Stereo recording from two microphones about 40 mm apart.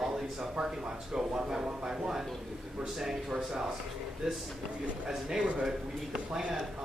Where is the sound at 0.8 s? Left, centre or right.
Centre.